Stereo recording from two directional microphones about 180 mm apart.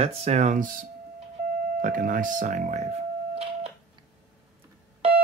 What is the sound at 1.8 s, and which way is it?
Speech, 50° right (ahead or behind).